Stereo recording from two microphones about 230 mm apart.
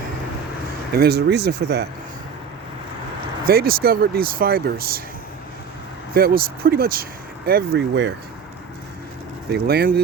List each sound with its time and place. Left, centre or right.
0.9 s speech: right
3.4 s speech: right
6.1 s speech: right
9.5 s speech: right